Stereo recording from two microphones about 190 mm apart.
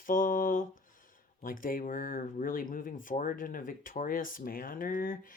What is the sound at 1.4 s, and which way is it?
Speech, 45° left (ahead or behind).